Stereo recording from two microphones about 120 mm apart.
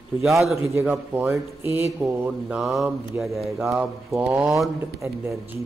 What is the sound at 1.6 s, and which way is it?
Speech, 20° right (ahead or behind).